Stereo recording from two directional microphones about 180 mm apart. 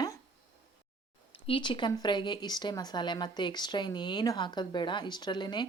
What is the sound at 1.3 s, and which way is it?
Speech, 30° left (ahead or behind).